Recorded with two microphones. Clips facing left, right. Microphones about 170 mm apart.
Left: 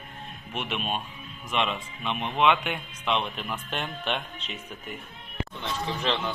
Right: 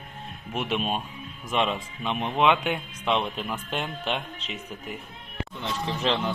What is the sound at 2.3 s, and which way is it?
Speech, 5° right (ahead or behind).